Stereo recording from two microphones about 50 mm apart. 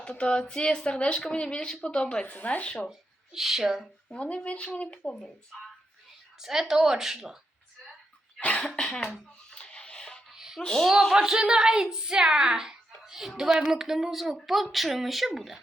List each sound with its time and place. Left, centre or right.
0.0 s speech: centre
2.2 s speech: left
2.9 s speech: centre
4.1 s speech: left
6.4 s a woman's voice: centre
8.4 s speech: left
9.0 s speech: centre
9.5 s music: centre
10.3 s a sound: centre
10.6 s speech: centre
11.1 s a woman's voice: centre